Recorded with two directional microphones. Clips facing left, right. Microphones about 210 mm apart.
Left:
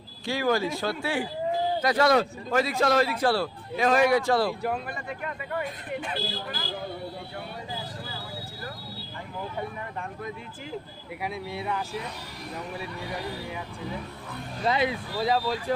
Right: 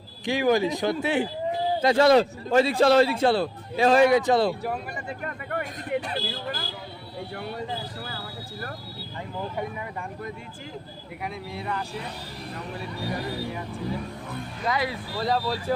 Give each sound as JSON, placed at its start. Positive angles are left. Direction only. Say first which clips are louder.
{"t": 0.3, "sound": "a man's voice", "louder": "right 4 dB", "side_deg": -15}
{"t": 5.2, "sound": "speech", "louder": "left 1 dB", "side_deg": -50}
{"t": 11.2, "sound": "speech", "louder": "left 1 dB", "side_deg": 5}
{"t": 14.6, "sound": "speech", "louder": "left 2 dB", "side_deg": 25}
{"t": 15.2, "sound": "speech", "louder": "even", "side_deg": 5}